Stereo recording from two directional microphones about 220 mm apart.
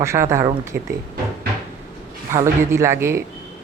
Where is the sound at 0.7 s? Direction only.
50° right (ahead or behind).